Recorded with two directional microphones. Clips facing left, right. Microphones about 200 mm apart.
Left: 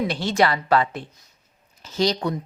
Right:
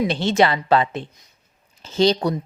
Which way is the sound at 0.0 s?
25° right (ahead or behind).